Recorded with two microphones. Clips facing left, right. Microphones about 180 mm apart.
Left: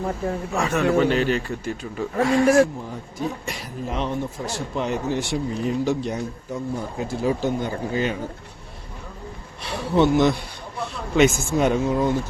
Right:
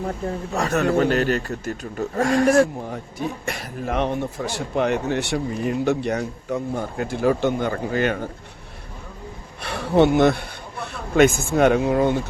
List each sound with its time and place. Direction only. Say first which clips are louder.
0.5 s a man's voice: even; 40° right (ahead or behind)
3.4 s speech: right 2 dB; 55° right (ahead or behind)
9.6 s speech: right 2 dB; 55° right (ahead or behind)